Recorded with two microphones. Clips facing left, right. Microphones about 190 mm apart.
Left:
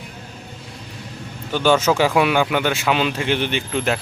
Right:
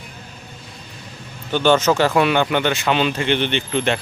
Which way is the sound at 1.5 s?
5° left (ahead or behind).